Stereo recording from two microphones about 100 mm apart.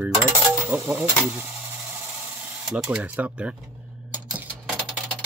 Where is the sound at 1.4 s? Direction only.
20° right (ahead or behind).